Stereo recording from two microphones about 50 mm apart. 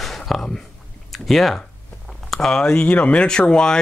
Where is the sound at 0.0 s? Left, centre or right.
Centre.